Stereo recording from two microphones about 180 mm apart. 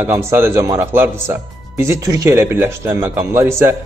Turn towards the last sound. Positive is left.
turn(degrees=-15)  # may be behind; listen again after turning